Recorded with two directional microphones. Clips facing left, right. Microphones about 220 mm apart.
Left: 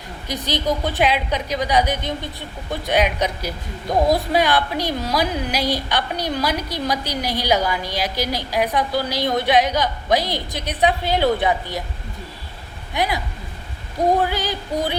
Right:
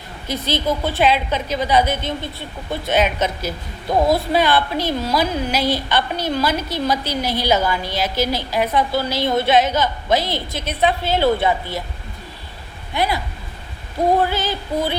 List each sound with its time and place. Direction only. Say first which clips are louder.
0.3 s a woman's voice: right 1 dB; 15° left (ahead or behind)
12.9 s a woman's voice: right 1 dB; 15° left (ahead or behind)
14.3 s a woman's voice: right 1 dB; 15° left (ahead or behind)